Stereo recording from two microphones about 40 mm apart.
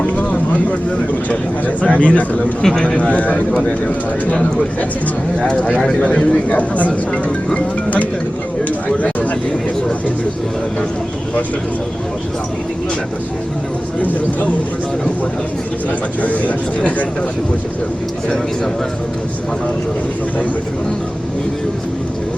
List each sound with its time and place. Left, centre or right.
0.0 s vehicle: left
1.3 s speech: left
2.6 s speech: centre
2.8 s speech: left
6.0 s speech: left
16.2 s speech: left